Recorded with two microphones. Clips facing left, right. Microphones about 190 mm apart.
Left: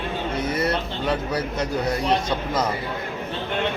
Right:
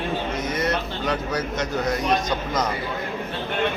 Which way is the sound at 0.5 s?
30° left (ahead or behind).